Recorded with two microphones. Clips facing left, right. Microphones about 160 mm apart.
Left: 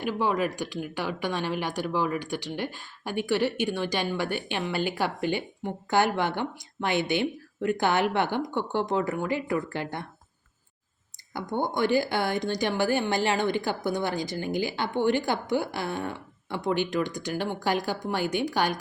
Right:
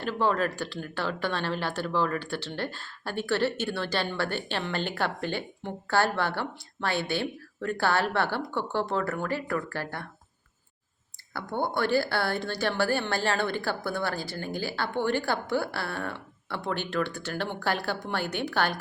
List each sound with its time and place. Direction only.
0.0 s speech: 15° left (ahead or behind)
11.3 s speech: 15° left (ahead or behind)